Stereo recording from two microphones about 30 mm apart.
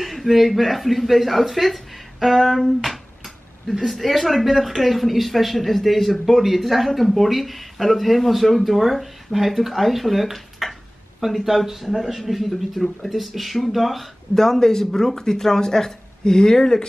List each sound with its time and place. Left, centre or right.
0.0 s a sound: centre
0.6 s speech: centre
12.2 s speech: centre
14.3 s speech: centre